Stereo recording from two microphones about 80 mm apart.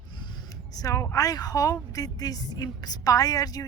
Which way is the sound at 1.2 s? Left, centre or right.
Left.